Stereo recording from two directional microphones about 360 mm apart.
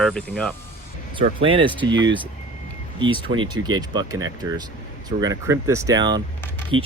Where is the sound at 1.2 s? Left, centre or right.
Centre.